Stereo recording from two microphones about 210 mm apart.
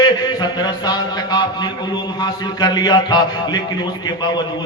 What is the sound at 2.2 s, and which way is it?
A man's voice, 20° left (ahead or behind).